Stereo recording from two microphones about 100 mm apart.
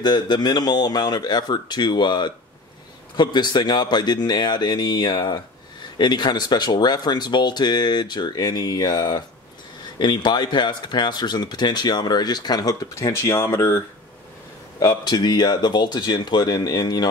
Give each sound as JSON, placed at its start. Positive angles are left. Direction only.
{"t": 0.0, "sound": "speech", "side_deg": 45}
{"t": 13.1, "sound": "speech", "side_deg": 25}
{"t": 14.8, "sound": "speech", "side_deg": 40}